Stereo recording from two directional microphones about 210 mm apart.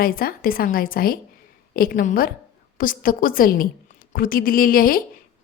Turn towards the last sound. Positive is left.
turn(degrees=45)  # may be behind; listen again after turning